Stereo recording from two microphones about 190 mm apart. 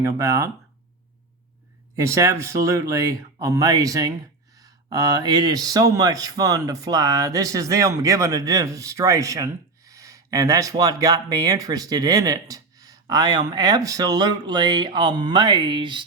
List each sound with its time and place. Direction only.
0.0 s speech: 15° right (ahead or behind)
2.0 s speech: 15° right (ahead or behind)